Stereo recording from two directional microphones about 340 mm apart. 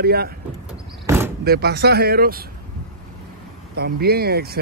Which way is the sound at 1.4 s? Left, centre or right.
Right.